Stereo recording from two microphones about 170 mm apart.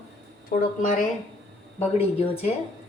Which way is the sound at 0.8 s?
50° left (ahead or behind).